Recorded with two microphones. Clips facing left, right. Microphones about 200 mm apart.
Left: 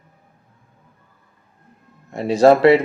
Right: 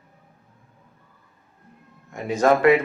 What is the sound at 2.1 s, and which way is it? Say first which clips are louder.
Speech: left 6 dB; 35° left (ahead or behind).